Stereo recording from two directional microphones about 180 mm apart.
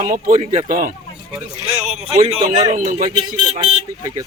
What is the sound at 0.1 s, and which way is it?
Speech, 45° right (ahead or behind).